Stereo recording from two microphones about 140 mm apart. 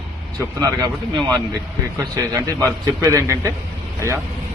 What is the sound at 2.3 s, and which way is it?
Speech, 25° right (ahead or behind).